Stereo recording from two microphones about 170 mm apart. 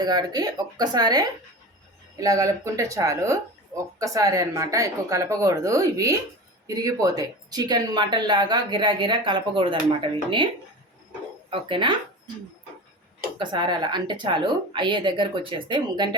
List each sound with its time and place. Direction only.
0.0 s speech: 25° right (ahead or behind)
11.7 s speech: 30° right (ahead or behind)
13.4 s speech: 25° right (ahead or behind)